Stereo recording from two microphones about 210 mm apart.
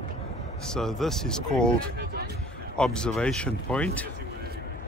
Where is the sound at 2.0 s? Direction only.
50° right (ahead or behind).